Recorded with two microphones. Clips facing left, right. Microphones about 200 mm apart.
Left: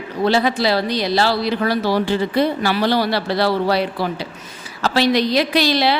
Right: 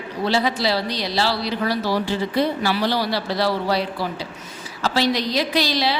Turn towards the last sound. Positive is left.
turn(degrees=60)  # may be behind; listen again after turning